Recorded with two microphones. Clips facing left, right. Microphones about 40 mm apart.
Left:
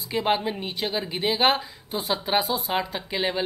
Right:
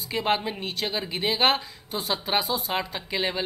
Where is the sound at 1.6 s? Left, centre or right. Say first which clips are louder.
Left 2 dB; centre.